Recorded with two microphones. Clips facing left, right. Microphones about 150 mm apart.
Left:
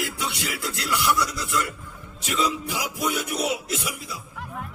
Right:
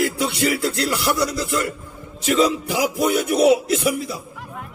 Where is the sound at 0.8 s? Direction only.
35° right (ahead or behind).